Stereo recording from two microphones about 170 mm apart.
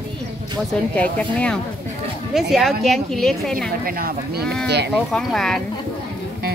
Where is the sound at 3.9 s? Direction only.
60° right (ahead or behind).